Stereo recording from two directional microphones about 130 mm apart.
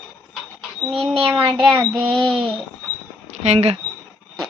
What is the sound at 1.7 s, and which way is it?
Child singing, 40° right (ahead or behind).